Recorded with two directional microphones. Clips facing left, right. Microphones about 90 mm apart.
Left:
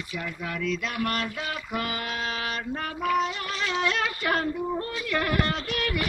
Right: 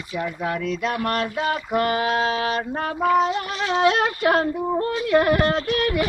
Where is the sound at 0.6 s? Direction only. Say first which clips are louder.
Right 1 dB; 25° right (ahead or behind).